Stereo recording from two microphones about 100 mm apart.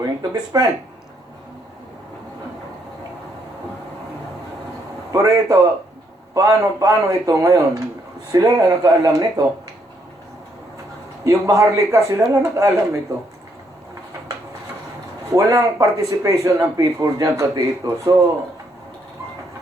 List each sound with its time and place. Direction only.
0.0 s speech: 40° right (ahead or behind)
5.1 s speech: 35° right (ahead or behind)
11.2 s speech: 30° right (ahead or behind)
15.3 s speech: 35° right (ahead or behind)